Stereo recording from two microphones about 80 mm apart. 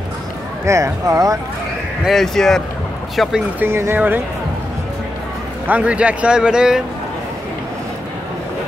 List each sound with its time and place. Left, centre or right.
0.7 s speech: right
2.0 s speech: centre
3.5 s speech: right
5.7 s speech: centre